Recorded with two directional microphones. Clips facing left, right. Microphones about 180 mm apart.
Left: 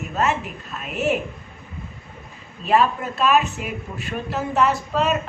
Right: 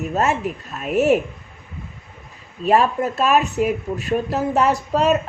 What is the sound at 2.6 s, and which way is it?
Speech, 40° right (ahead or behind).